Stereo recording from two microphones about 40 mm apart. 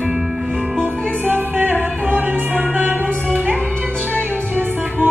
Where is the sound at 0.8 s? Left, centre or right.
Right.